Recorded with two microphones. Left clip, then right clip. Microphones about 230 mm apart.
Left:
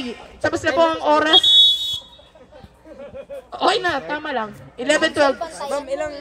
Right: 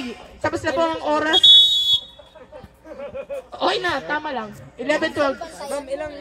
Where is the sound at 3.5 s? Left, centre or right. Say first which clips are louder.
Left 3 dB; left.